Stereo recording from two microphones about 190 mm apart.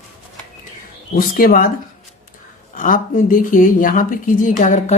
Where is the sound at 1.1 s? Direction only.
50° left (ahead or behind).